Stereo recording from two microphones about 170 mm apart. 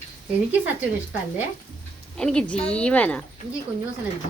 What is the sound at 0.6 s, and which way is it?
Speech, 10° right (ahead or behind).